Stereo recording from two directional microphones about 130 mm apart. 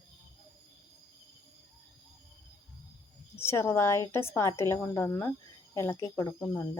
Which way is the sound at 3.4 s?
20° left (ahead or behind).